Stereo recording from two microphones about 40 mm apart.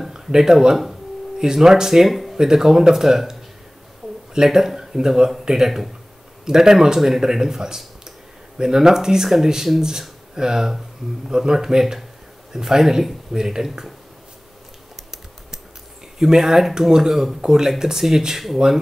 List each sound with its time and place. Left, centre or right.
0.1 s speech: centre
2.0 s speech: centre
2.3 s speech: centre
15.0 s typing: centre
16.2 s speech: centre